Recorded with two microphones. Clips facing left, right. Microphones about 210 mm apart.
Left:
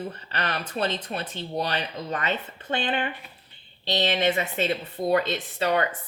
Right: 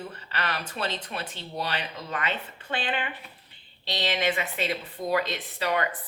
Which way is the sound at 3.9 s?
25° left (ahead or behind).